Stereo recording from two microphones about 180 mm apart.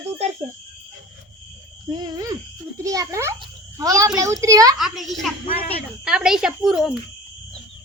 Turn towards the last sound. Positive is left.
turn(degrees=-5)  # may be behind; listen again after turning